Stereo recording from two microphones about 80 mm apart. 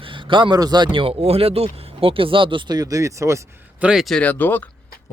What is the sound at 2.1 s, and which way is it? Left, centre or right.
Speech, right.